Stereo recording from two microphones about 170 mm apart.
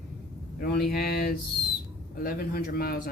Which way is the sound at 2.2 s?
60° left (ahead or behind).